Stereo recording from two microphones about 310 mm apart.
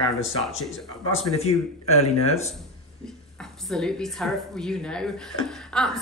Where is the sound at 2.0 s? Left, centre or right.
Centre.